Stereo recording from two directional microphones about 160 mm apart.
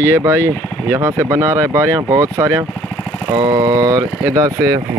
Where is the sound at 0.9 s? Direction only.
15° right (ahead or behind).